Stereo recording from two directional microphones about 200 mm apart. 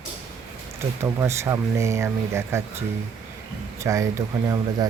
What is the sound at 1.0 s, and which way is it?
Speech, 15° right (ahead or behind).